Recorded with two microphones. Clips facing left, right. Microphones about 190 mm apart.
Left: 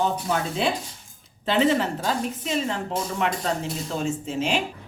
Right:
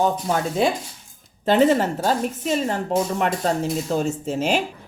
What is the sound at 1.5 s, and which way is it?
A woman's voice, 45° right (ahead or behind).